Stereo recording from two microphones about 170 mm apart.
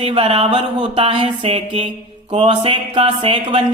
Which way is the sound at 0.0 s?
35° right (ahead or behind).